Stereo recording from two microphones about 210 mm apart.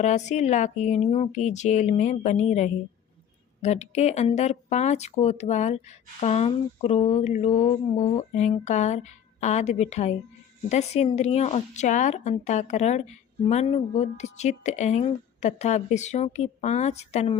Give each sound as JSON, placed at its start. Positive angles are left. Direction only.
{"t": 0.0, "sound": "speech", "side_deg": 35}